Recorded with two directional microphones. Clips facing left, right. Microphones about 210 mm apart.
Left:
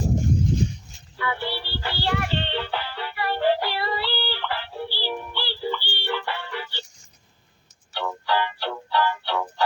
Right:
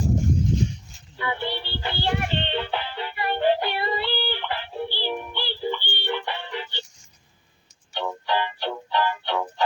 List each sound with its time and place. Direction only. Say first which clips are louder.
1.1 s music: even; 20° right (ahead or behind)
7.9 s music: even; 20° right (ahead or behind)